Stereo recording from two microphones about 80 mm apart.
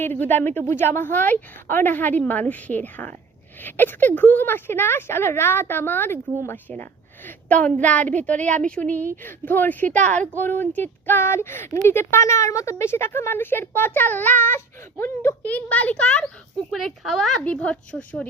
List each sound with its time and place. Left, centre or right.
0.0 s speech: left
15.4 s speech: centre
16.7 s speech: centre
17.4 s a woman's voice: centre